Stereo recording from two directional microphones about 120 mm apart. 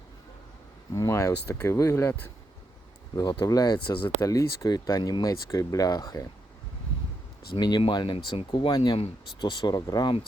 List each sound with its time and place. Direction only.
0.9 s speech: 25° left (ahead or behind)
3.2 s speech: 30° left (ahead or behind)
4.2 s speech: 25° left (ahead or behind)
7.5 s speech: 40° left (ahead or behind)